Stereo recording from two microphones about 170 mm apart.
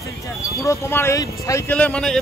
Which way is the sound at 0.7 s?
15° left (ahead or behind).